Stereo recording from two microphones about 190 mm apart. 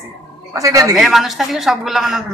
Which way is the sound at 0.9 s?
Centre (ahead or behind).